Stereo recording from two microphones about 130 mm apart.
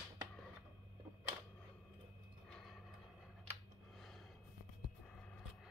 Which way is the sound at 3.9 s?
Centre (ahead or behind).